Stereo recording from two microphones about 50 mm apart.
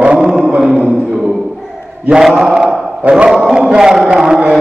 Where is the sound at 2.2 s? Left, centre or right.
Centre.